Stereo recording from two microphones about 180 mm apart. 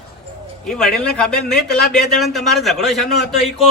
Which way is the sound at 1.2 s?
60° left (ahead or behind).